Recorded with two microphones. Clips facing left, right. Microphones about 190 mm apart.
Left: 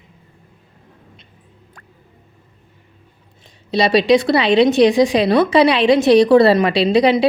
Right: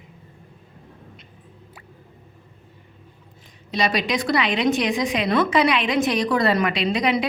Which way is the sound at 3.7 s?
30° left (ahead or behind).